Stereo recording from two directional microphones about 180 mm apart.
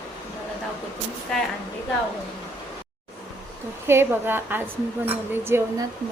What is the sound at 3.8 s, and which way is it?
A woman's voice, 10° right (ahead or behind).